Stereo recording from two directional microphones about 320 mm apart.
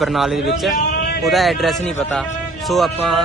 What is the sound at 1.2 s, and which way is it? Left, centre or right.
Speech, centre.